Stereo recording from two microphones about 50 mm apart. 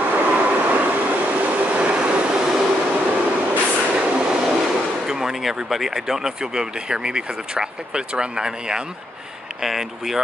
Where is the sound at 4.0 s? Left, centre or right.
Centre.